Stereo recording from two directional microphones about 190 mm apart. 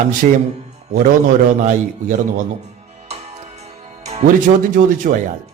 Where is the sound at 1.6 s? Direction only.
40° right (ahead or behind).